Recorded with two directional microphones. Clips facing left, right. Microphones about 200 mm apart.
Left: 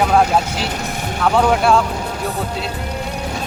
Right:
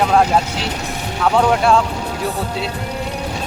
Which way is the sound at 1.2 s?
Centre (ahead or behind).